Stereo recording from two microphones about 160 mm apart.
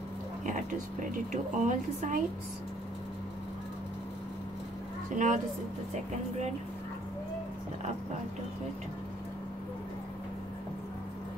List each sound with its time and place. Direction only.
0.5 s a woman's voice: 50° right (ahead or behind)
5.1 s a woman's voice: 50° right (ahead or behind)